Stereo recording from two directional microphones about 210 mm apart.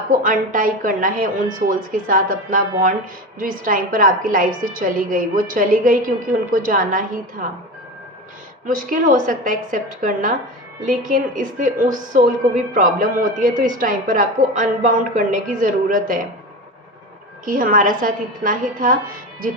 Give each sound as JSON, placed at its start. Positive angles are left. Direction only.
{"t": 0.2, "sound": "a woman's voice", "side_deg": -40}
{"t": 8.6, "sound": "a woman's voice", "side_deg": -40}
{"t": 17.4, "sound": "a woman's voice", "side_deg": -40}